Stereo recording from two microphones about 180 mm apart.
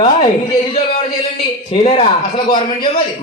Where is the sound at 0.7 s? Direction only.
35° left (ahead or behind).